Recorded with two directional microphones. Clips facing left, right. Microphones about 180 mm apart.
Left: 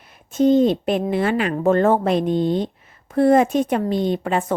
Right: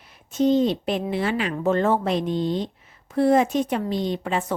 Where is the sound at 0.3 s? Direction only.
50° left (ahead or behind).